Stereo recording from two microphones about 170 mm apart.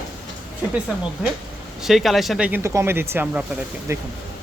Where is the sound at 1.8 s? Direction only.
Centre (ahead or behind).